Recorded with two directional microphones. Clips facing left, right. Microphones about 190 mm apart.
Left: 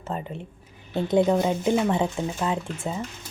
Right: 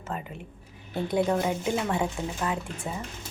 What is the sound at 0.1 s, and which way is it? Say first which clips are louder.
Speech: left 4 dB; 30° left (ahead or behind).